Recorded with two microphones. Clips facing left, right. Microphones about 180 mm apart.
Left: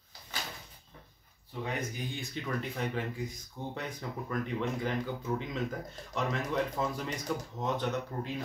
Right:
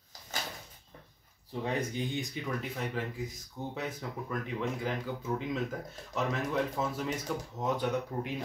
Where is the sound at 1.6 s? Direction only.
30° right (ahead or behind).